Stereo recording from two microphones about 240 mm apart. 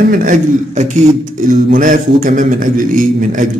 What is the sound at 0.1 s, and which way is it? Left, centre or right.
Mantra, right.